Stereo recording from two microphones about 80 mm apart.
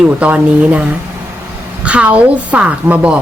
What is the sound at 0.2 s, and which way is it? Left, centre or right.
A woman's voice, centre.